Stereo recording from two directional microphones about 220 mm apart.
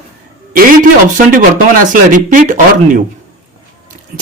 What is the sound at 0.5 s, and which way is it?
Speech, 40° right (ahead or behind).